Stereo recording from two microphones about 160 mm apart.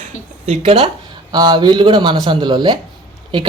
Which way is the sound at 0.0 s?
45° right (ahead or behind).